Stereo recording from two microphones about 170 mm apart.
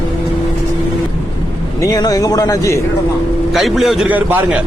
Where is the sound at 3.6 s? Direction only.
Centre (ahead or behind).